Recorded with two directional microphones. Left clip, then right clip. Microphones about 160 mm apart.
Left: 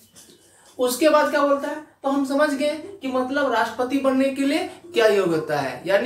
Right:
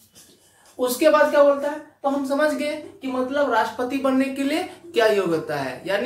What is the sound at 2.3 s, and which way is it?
Speech, 30° right (ahead or behind).